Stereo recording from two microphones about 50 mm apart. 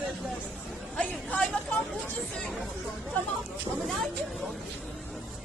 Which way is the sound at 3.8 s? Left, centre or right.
Centre.